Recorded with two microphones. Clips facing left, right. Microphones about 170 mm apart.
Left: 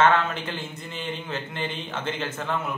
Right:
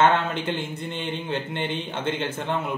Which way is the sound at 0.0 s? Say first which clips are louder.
Right 1 dB; 25° right (ahead or behind).